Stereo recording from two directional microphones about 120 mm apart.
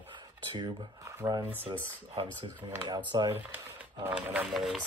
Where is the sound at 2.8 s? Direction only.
35° right (ahead or behind).